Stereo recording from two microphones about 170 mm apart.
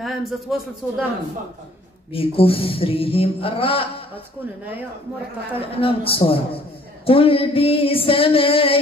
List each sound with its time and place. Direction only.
0.0 s speech: centre (ahead or behind)
2.1 s speech: 35° left (ahead or behind)
5.8 s speech: 35° left (ahead or behind)